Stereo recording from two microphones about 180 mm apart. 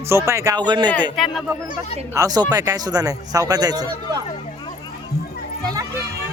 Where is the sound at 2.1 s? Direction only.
20° right (ahead or behind).